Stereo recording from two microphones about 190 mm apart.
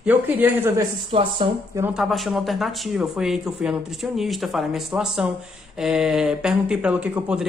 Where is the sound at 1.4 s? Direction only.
30° right (ahead or behind).